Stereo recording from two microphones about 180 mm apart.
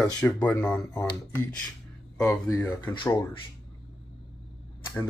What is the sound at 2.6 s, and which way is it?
Speech, 10° left (ahead or behind).